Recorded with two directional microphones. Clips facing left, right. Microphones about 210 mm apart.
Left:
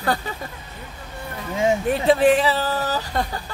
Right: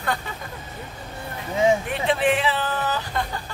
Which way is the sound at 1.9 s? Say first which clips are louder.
Left 6 dB; 40° left (ahead or behind).